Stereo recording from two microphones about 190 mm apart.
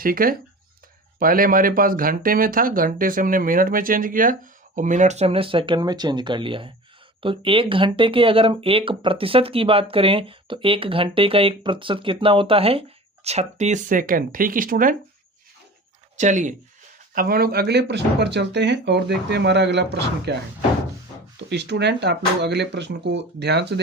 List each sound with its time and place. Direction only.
0.0 s speech: 50° right (ahead or behind)
16.1 s speech: 40° right (ahead or behind)
17.2 s speech: 55° right (ahead or behind)
21.5 s speech: 65° right (ahead or behind)